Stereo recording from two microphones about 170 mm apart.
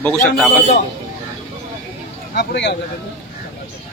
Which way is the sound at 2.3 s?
80° left.